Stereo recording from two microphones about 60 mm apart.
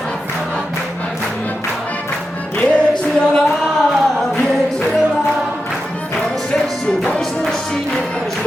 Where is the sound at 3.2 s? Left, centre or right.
Centre.